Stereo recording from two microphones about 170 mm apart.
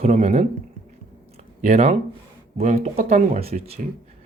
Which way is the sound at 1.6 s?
40° right (ahead or behind).